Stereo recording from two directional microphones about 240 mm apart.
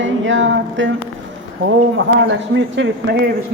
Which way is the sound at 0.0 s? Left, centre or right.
Right.